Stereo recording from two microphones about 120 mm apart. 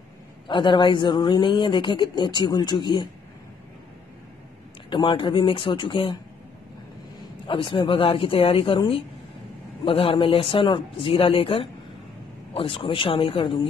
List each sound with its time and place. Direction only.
0.5 s a man's voice: 40° left (ahead or behind)
4.8 s a man's voice: 45° left (ahead or behind)
7.4 s a man's voice: 45° left (ahead or behind)